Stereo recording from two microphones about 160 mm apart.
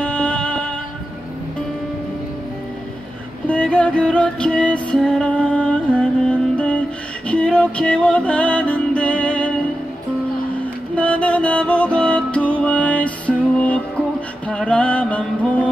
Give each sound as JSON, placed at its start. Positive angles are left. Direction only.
{"t": 0.0, "sound": "music", "side_deg": 5}
{"t": 3.4, "sound": "music", "side_deg": 5}
{"t": 11.0, "sound": "music", "side_deg": 5}
{"t": 14.5, "sound": "music", "side_deg": 5}